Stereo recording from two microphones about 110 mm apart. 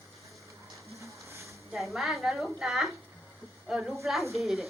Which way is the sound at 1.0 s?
30° right (ahead or behind).